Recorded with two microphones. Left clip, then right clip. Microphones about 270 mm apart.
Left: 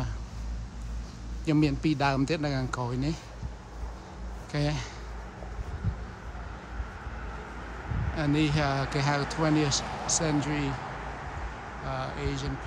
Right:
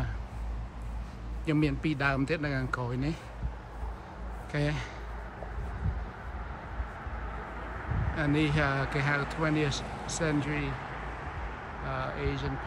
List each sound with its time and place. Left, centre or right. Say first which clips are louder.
1.4 s speech: left 3 dB; centre
4.5 s speech: left 1 dB; centre
8.2 s speech: left 1 dB; centre
11.9 s speech: even; centre